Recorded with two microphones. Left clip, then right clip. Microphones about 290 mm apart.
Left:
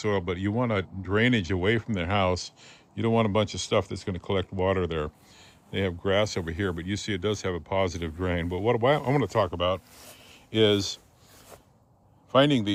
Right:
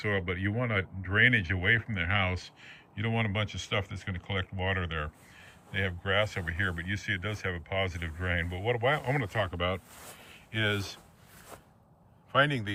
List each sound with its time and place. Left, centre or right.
0.0 s speech: centre
7.2 s speech: left
7.8 s speech: centre
10.2 s a sound: centre
12.4 s speech: left